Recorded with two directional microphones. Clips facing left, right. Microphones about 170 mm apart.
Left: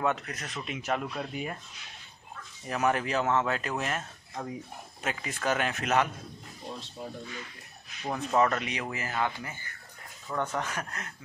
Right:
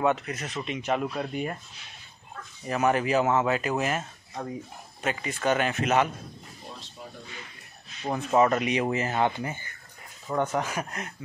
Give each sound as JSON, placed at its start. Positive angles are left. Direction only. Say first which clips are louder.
{"t": 0.0, "sound": "speech", "louder": "right 4 dB", "side_deg": 0}
{"t": 2.6, "sound": "speech", "louder": "right 3 dB", "side_deg": 0}
{"t": 8.3, "sound": "speech", "louder": "right 4 dB", "side_deg": -15}
{"t": 10.5, "sound": "speech", "louder": "right 4 dB", "side_deg": -10}